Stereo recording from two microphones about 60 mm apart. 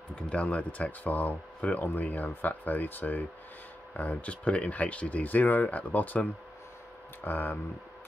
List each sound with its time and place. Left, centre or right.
0.1 s speech: left
7.2 s speech: left